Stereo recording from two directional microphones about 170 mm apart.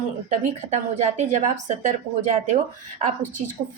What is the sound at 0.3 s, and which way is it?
Speech, 45° right (ahead or behind).